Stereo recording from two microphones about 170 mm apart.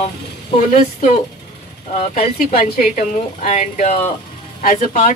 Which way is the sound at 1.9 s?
35° left (ahead or behind).